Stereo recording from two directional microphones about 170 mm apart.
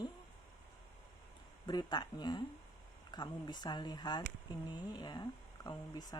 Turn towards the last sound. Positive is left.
turn(degrees=25)  # may be behind; listen again after turning